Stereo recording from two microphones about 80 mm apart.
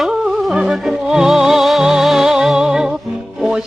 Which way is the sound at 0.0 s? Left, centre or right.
Centre.